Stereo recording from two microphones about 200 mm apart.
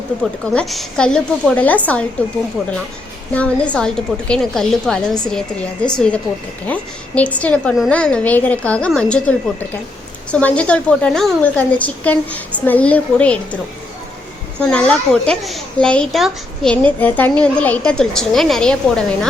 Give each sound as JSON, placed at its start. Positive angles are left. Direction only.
{"t": 0.5, "sound": "a woman's voice", "side_deg": 0}
{"t": 3.3, "sound": "a woman's voice", "side_deg": 5}
{"t": 14.6, "sound": "a woman's voice", "side_deg": 5}